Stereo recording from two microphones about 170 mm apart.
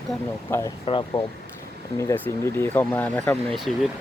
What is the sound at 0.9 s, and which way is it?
Speech, 25° left (ahead or behind).